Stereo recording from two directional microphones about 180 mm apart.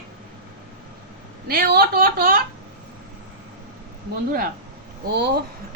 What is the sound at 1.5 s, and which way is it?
Speech, 55° right (ahead or behind).